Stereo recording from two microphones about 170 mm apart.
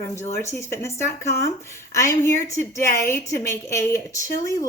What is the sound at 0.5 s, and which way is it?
A woman's voice, 15° left (ahead or behind).